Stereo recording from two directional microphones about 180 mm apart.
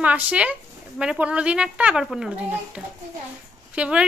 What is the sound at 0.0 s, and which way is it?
Speech, 5° right (ahead or behind).